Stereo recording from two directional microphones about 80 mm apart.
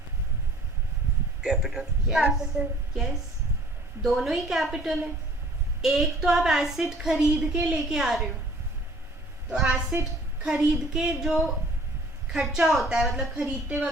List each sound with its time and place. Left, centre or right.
1.4 s a woman's voice: centre
2.5 s a woman's voice: right
4.0 s a woman's voice: centre
9.5 s a woman's voice: centre